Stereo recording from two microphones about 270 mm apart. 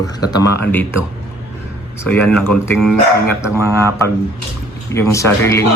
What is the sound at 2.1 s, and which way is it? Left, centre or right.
A man's voice, centre.